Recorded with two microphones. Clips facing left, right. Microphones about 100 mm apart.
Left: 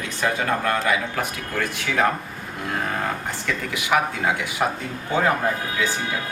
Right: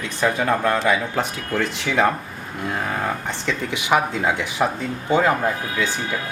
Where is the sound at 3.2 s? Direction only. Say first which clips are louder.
Right 2 dB; 20° right (ahead or behind).